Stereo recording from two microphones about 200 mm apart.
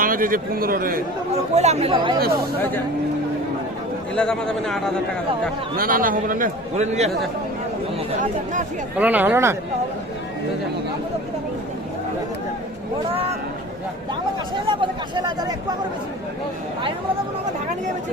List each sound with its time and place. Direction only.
0.0 s a man's voice: 45° right (ahead or behind)
1.5 s speech: 35° right (ahead or behind)
4.1 s a man's voice: 5° left (ahead or behind)
5.7 s a man's voice: 45° right (ahead or behind)
9.0 s speech: 10° right (ahead or behind)
14.7 s speech: 25° right (ahead or behind)